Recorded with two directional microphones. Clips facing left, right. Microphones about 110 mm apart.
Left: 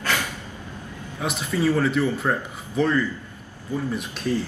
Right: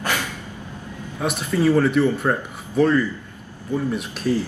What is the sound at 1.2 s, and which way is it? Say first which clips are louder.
Speech: right 3 dB; centre (ahead or behind).